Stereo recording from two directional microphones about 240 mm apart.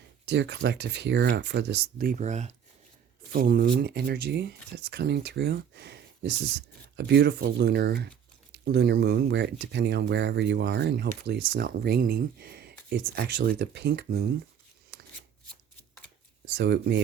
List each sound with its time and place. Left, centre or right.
0.3 s speech: right
16.6 s speech: right